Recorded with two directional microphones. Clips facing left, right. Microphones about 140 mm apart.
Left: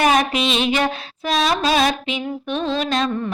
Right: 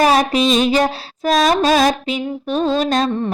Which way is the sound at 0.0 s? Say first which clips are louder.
Right 3 dB; 35° right (ahead or behind).